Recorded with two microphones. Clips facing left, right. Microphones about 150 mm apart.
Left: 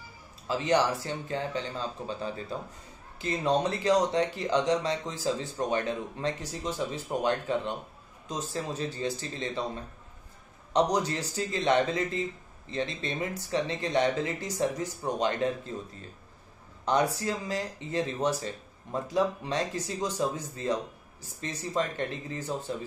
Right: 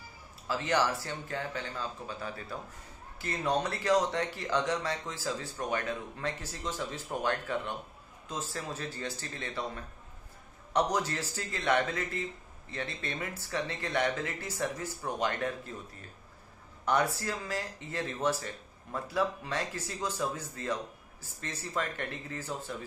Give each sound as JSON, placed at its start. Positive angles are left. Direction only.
{"t": 0.5, "sound": "speech", "side_deg": 15}
{"t": 10.7, "sound": "speech", "side_deg": 15}